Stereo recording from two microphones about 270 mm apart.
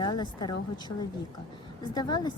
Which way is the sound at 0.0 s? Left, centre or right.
Centre.